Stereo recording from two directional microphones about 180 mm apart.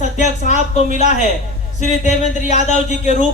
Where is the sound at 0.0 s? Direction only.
40° left (ahead or behind).